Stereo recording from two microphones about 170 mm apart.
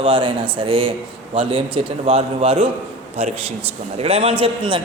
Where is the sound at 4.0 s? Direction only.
35° right (ahead or behind).